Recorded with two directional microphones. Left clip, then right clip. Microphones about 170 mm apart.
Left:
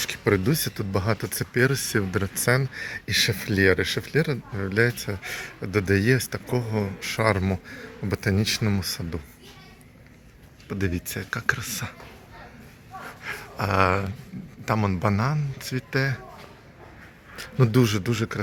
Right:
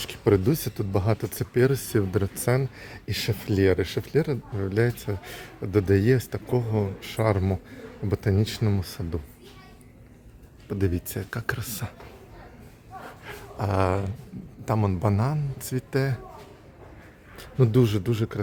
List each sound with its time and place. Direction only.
0.0 s speech: 20° right (ahead or behind)
10.7 s a man's voice: 25° right (ahead or behind)
13.2 s a sound: 15° right (ahead or behind)
14.6 s a man's voice: 15° right (ahead or behind)
17.3 s speech: 5° right (ahead or behind)